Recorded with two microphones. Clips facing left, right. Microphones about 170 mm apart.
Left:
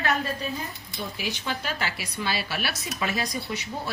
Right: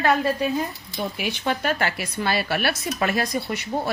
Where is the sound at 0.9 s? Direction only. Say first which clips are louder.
Right 4 dB; 60° right (ahead or behind).